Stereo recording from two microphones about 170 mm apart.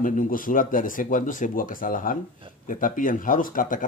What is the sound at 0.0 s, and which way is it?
Speech, 50° left (ahead or behind).